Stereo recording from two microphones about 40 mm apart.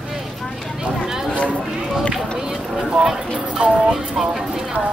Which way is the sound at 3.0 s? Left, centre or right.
Centre.